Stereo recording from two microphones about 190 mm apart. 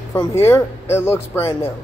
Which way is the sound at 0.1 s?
15° left (ahead or behind).